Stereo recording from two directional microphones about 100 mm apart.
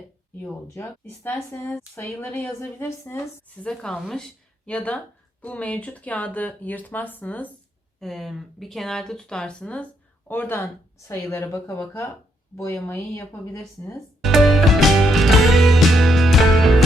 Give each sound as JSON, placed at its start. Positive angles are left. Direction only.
{"t": 0.8, "sound": "a woman's voice", "side_deg": 25}
{"t": 3.6, "sound": "speech", "side_deg": 5}
{"t": 8.0, "sound": "speech", "side_deg": 0}
{"t": 10.2, "sound": "a woman's voice", "side_deg": 20}
{"t": 14.2, "sound": "music", "side_deg": 0}